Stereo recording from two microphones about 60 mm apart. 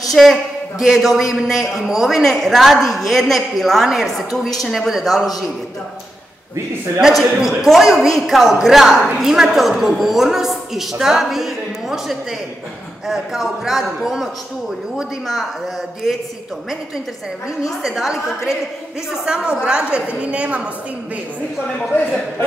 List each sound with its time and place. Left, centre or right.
0.2 s a man's voice: centre
7.0 s a woman's voice: centre
17.8 s a woman's voice: centre
19.2 s a woman's voice: centre